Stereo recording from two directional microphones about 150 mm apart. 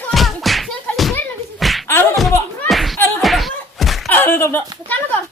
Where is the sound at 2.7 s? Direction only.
Centre (ahead or behind).